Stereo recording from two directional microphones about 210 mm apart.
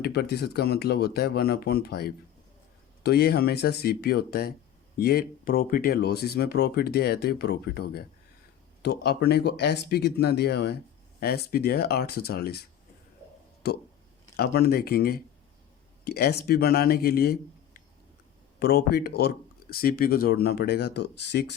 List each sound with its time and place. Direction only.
0.0 s speech: 50° left (ahead or behind)
13.6 s speech: 50° left (ahead or behind)
18.6 s speech: 50° left (ahead or behind)